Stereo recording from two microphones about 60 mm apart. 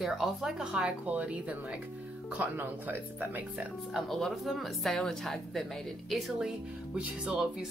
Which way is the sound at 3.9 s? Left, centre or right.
Centre.